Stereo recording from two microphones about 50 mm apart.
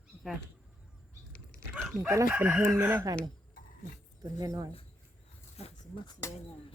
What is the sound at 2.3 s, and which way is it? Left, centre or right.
Chicken, right.